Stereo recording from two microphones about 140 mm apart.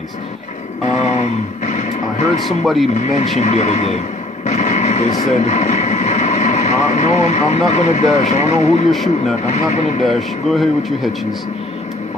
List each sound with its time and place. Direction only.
1.0 s a sound: 60° left (ahead or behind)
2.4 s speech: centre (ahead or behind)
2.9 s speech: 60° left (ahead or behind)
10.0 s speech: centre (ahead or behind)